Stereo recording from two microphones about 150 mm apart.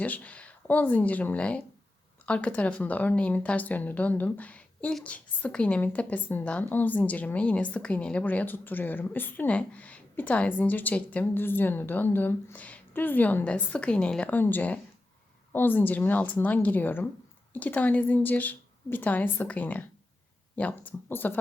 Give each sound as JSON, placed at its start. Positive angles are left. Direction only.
{"t": 0.0, "sound": "speech", "side_deg": 10}